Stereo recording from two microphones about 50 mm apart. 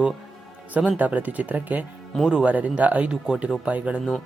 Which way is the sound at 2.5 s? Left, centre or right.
Right.